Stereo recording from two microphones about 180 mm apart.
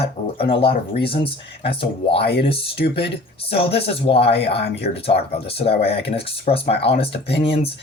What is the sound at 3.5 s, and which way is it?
Speech, 30° left (ahead or behind).